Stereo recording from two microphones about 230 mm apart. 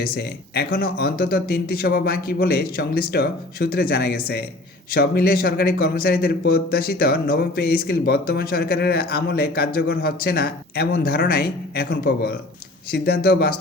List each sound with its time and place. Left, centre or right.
0.0 s speech: left